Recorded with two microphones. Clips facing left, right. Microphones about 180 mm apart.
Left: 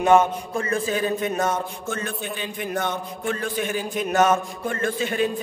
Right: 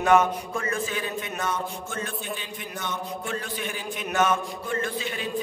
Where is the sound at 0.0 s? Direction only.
30° left (ahead or behind).